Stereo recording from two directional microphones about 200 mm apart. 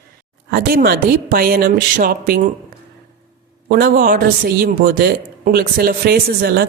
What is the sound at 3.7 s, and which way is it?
A woman's voice, 45° right (ahead or behind).